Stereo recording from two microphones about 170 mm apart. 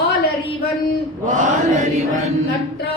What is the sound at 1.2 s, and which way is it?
Chant, 45° right (ahead or behind).